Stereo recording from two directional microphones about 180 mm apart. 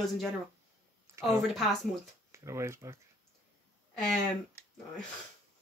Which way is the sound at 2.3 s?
15° right (ahead or behind).